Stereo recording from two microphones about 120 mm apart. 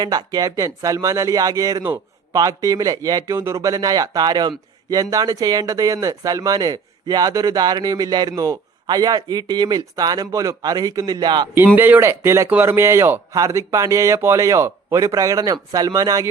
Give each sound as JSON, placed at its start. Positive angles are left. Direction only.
{"t": 0.0, "sound": "speech", "side_deg": -35}
{"t": 11.5, "sound": "speech", "side_deg": -20}